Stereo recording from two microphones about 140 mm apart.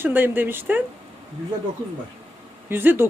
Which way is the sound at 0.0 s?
15° right (ahead or behind).